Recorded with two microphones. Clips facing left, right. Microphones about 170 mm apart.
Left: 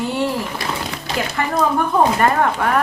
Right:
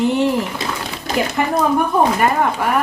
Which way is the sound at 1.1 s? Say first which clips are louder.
Right 4 dB; 45° right (ahead or behind).